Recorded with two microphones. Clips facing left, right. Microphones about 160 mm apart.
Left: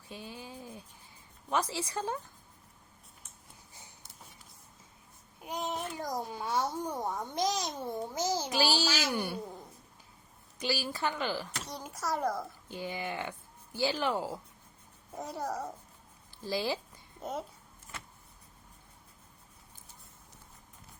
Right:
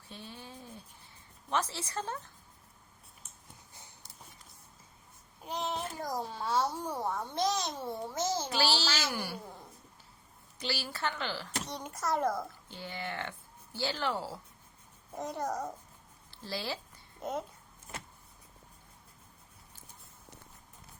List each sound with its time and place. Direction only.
0.1 s a sound: 10° left (ahead or behind)
1.5 s a child's voice: 10° left (ahead or behind)
5.4 s a child's voice: 10° left (ahead or behind)
9.1 s speech: 25° left (ahead or behind)
10.6 s a child's voice: 15° left (ahead or behind)
11.6 s a child's voice: centre (ahead or behind)
12.7 s a child's voice: 15° left (ahead or behind)
15.1 s a child's voice: 5° left (ahead or behind)
16.4 s a child's voice: 15° left (ahead or behind)